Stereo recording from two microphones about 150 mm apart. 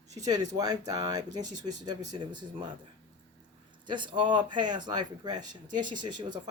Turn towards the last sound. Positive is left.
turn(degrees=-30)  # may be behind; listen again after turning